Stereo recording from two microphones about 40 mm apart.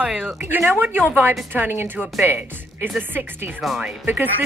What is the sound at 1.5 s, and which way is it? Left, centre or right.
A woman's voice, right.